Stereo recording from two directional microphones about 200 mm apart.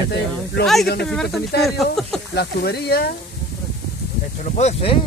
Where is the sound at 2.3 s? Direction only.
55° left (ahead or behind).